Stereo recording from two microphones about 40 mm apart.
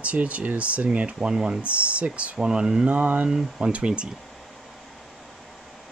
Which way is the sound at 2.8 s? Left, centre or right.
Right.